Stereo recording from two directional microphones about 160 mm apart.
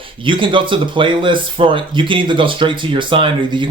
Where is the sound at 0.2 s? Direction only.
30° right (ahead or behind).